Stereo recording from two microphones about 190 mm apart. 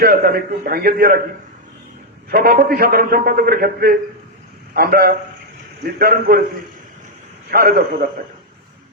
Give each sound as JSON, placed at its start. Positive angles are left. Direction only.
{"t": 0.0, "sound": "a man's voice", "side_deg": -50}
{"t": 2.3, "sound": "a man's voice", "side_deg": -50}
{"t": 7.5, "sound": "a man's voice", "side_deg": -50}